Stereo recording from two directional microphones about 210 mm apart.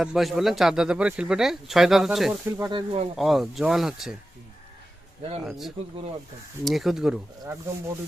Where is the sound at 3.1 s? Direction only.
Centre (ahead or behind).